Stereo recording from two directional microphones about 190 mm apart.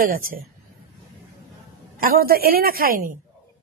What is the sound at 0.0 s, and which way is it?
Speech, 45° right (ahead or behind).